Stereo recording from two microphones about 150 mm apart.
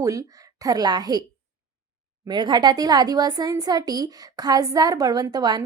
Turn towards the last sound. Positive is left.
turn(degrees=-25)  # may be behind; listen again after turning